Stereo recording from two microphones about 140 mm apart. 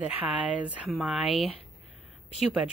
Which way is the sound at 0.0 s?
10° right (ahead or behind).